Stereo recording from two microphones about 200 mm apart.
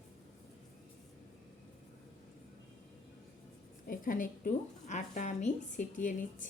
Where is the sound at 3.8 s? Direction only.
45° left (ahead or behind).